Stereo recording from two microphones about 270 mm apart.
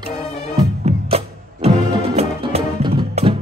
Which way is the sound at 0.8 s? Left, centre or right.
Right.